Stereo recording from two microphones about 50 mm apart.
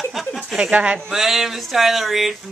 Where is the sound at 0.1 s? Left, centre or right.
Centre.